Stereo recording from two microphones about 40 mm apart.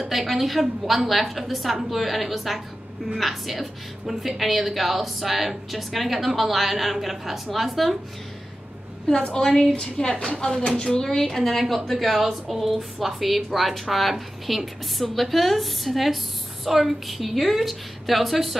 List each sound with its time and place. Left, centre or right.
0.0 s a woman's voice: centre
9.2 s a woman's voice: centre
11.2 s a woman's voice: centre